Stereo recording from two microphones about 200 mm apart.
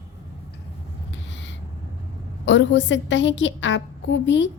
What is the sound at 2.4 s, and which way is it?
A woman's voice, 65° left (ahead or behind).